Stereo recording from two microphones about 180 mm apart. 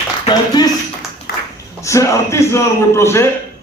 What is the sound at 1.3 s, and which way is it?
Clapping, 65° left (ahead or behind).